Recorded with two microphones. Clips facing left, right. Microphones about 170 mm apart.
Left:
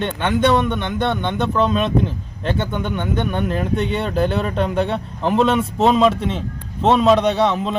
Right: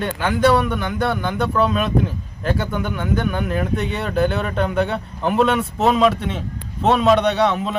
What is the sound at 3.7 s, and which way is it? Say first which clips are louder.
Speech: left 2 dB; 30° left (ahead or behind).